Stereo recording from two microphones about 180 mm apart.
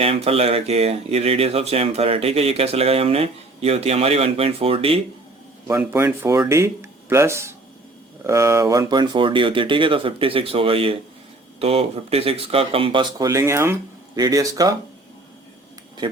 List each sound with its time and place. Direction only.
0.0 s speech: 35° right (ahead or behind)
5.6 s speech: 10° right (ahead or behind)